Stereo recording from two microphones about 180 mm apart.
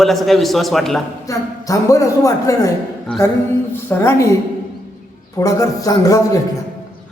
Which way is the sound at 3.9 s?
15° left (ahead or behind).